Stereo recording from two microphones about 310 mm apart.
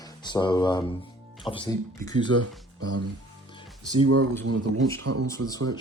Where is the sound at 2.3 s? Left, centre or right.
Right.